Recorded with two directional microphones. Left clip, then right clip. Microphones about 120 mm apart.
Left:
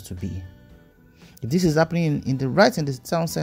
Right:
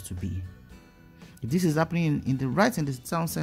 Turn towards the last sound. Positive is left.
turn(degrees=25)  # may be behind; listen again after turning